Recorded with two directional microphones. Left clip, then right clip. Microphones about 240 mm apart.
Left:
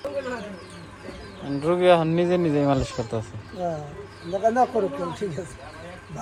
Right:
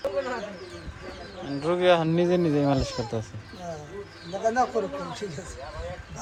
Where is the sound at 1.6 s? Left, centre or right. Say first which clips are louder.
Left 3 dB; centre.